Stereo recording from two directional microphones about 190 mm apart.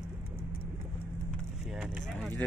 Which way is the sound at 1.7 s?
Centre (ahead or behind).